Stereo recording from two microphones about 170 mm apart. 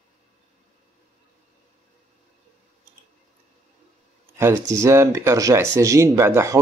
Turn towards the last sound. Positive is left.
turn(degrees=-15)  # may be behind; listen again after turning